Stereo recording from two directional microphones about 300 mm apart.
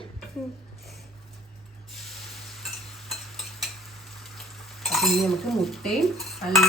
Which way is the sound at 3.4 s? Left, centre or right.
Centre.